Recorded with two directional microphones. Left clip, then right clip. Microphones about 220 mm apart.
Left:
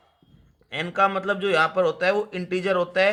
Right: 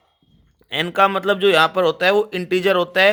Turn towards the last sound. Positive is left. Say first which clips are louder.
# right 6 dB
turn(degrees=-50)  # may be behind; listen again after turning